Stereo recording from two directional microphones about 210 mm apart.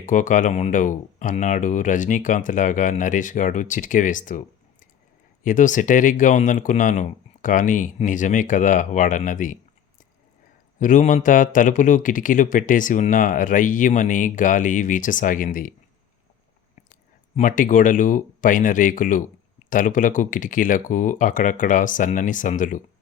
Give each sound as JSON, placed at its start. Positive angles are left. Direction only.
{"t": 0.0, "sound": "speech", "side_deg": 35}
{"t": 10.8, "sound": "speech", "side_deg": 35}
{"t": 17.3, "sound": "speech", "side_deg": 40}